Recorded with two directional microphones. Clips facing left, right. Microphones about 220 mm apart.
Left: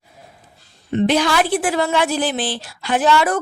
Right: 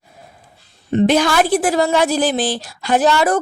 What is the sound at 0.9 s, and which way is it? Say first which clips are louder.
A woman's voice: right 3 dB; 45° right (ahead or behind).